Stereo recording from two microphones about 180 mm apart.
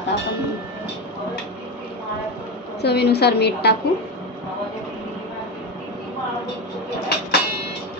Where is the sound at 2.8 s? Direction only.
65° left (ahead or behind).